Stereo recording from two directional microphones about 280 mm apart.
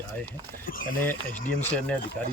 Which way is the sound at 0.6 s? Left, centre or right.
Left.